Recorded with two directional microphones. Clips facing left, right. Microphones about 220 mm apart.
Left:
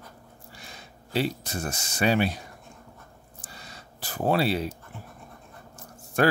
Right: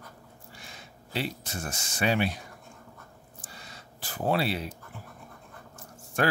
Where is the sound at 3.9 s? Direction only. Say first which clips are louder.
Left 3 dB; 40° left (ahead or behind).